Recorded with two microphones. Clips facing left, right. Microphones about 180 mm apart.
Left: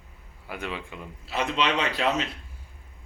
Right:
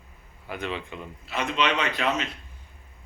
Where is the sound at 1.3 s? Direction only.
35° left (ahead or behind).